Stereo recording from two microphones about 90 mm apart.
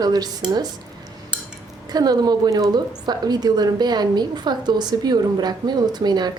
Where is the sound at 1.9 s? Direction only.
50° right (ahead or behind).